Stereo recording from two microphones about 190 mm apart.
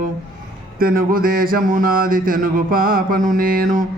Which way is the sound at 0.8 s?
50° right (ahead or behind).